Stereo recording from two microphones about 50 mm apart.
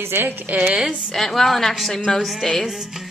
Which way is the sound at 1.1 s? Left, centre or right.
Centre.